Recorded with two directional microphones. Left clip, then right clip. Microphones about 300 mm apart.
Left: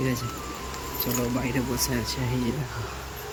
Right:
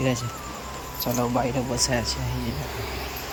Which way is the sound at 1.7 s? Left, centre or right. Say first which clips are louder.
Right 4 dB; centre.